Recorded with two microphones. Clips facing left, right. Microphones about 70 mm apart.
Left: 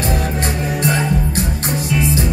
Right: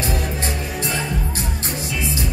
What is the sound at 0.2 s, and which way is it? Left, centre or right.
Music, left.